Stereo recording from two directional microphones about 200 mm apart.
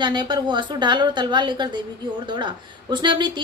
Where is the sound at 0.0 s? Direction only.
25° right (ahead or behind).